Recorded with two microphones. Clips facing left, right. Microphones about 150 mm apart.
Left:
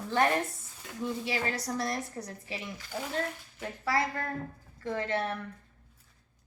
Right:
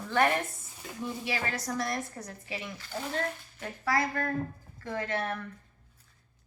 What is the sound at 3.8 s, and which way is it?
A woman's voice, 25° left (ahead or behind).